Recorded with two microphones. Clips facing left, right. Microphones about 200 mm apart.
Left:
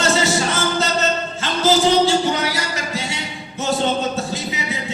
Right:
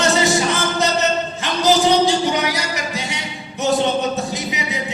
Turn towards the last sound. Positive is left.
turn(degrees=-15)  # may be behind; listen again after turning